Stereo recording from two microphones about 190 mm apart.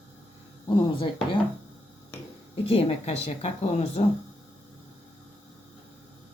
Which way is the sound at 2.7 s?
30° left (ahead or behind).